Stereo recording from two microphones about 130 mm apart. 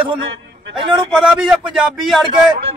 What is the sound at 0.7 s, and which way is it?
Speech, 40° right (ahead or behind).